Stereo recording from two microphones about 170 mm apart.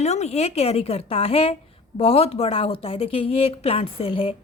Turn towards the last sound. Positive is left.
turn(degrees=35)  # may be behind; listen again after turning